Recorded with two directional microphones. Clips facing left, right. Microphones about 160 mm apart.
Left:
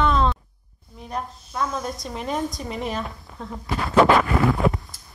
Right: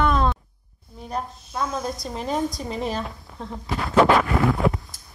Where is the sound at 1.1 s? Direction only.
35° right (ahead or behind).